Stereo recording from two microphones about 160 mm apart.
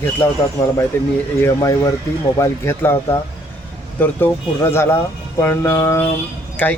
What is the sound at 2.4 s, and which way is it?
Speech, 15° left (ahead or behind).